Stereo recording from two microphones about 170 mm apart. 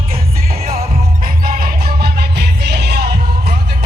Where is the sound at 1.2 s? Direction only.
60° right (ahead or behind).